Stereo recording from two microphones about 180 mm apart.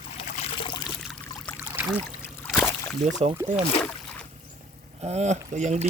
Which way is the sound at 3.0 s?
40° right (ahead or behind).